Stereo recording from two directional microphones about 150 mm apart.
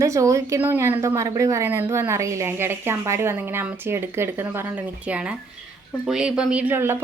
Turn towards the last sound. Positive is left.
turn(degrees=-15)  # may be behind; listen again after turning